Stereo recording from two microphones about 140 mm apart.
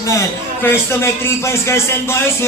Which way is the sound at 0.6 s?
15° left (ahead or behind).